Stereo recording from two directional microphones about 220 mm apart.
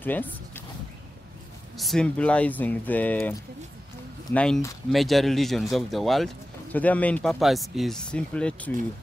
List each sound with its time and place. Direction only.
0.0 s speech: 10° left (ahead or behind)
1.8 s speech: centre (ahead or behind)